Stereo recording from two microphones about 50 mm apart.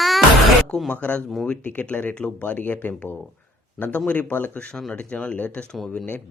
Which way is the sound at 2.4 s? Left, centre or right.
Left.